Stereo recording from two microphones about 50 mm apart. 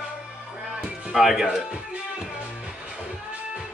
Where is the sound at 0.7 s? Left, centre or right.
Centre.